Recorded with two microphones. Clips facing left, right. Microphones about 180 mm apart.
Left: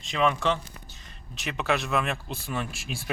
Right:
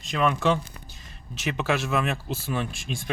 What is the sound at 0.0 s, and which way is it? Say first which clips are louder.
Speech: right 1 dB; centre (ahead or behind).